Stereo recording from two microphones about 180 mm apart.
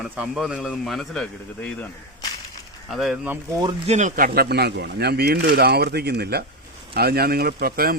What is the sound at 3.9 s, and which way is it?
Speech, 40° right (ahead or behind).